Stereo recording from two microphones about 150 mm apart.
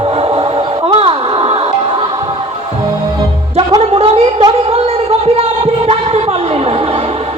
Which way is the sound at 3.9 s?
40° right (ahead or behind).